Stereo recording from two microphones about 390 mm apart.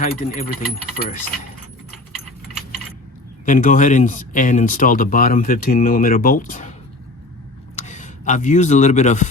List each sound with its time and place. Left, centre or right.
0.0 s speech: left
3.4 s speech: centre
7.8 s speech: centre